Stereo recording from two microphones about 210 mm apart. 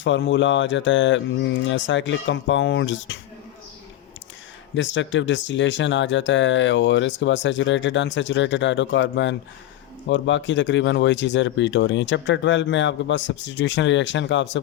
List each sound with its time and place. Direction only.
0.0 s speech: 60° left (ahead or behind)
4.7 s speech: 60° left (ahead or behind)